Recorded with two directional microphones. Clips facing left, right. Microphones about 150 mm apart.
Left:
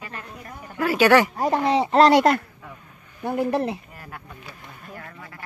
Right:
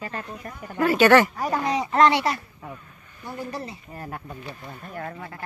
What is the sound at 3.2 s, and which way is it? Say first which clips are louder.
Speech: left 10 dB; 60° left (ahead or behind).